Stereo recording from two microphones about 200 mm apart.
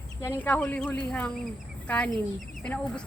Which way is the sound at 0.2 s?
10° left (ahead or behind).